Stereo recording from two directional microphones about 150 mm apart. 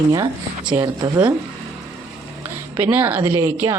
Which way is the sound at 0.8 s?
25° right (ahead or behind).